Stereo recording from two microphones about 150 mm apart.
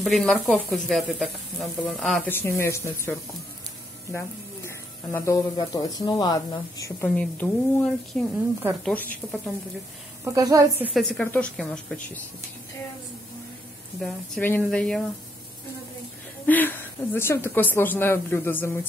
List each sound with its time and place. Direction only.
0.0 s speech: 5° left (ahead or behind)
2.2 s speech: 15° left (ahead or behind)
4.6 s speech: 20° left (ahead or behind)
7.2 s speech: 10° left (ahead or behind)
10.2 s a woman's voice: 20° right (ahead or behind)
10.9 s speech: 5° left (ahead or behind)
14.4 s speech: 10° left (ahead or behind)
16.4 s speech: 15° left (ahead or behind)